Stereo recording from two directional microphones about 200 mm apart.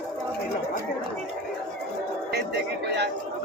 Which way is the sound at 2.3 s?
55° right (ahead or behind).